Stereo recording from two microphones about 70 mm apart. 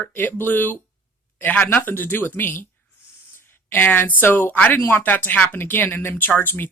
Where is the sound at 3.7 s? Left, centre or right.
Left.